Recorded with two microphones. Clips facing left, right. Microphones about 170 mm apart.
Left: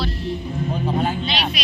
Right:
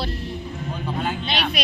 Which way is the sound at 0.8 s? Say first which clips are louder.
Left 4 dB; 30° left (ahead or behind).